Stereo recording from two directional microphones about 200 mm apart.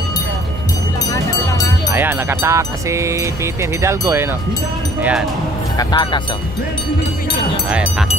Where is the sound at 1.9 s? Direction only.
10° right (ahead or behind).